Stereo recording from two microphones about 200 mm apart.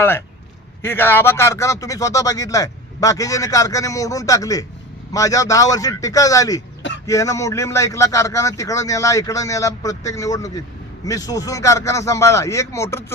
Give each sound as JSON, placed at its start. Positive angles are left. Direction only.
{"t": 0.8, "sound": "speech", "side_deg": 10}